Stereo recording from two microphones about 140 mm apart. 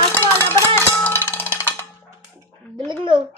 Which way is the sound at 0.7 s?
15° left (ahead or behind).